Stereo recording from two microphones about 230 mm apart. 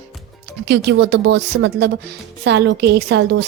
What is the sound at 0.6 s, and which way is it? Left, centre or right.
Speech, right.